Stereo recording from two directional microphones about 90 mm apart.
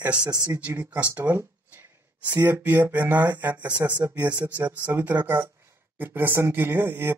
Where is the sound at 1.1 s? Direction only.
20° right (ahead or behind).